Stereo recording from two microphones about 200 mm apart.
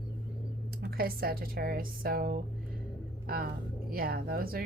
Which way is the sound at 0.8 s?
50° right (ahead or behind).